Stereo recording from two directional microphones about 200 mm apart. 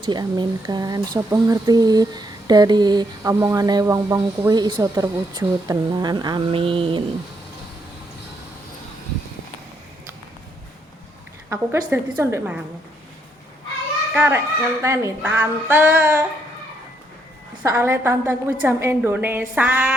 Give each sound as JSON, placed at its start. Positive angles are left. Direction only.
{"t": 0.0, "sound": "speech", "side_deg": -20}
{"t": 11.4, "sound": "speech", "side_deg": -10}
{"t": 14.1, "sound": "speech", "side_deg": -10}
{"t": 17.6, "sound": "speech", "side_deg": -15}